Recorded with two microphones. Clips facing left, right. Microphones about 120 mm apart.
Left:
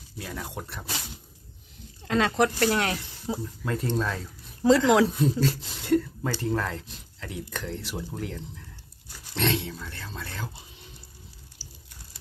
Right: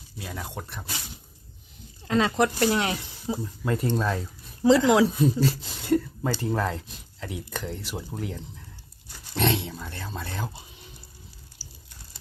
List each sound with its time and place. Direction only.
0.2 s speech: 5° right (ahead or behind)
2.0 s speech: 5° right (ahead or behind); by 10.5 s 20° right (ahead or behind)
11.6 s a sound: 10° right (ahead or behind)